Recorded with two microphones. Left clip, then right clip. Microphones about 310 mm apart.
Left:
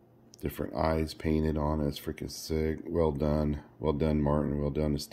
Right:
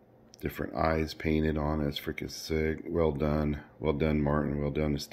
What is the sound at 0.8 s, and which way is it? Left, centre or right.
Speech, centre.